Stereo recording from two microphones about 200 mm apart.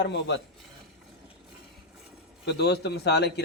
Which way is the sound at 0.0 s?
60° left (ahead or behind).